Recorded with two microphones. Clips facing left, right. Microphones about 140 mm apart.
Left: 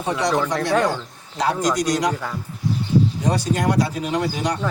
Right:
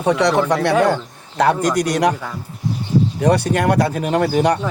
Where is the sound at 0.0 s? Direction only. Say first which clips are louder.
Right 5 dB; 70° right (ahead or behind).